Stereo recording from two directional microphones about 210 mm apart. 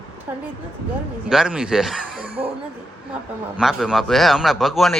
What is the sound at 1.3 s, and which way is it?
Speech, 5° right (ahead or behind).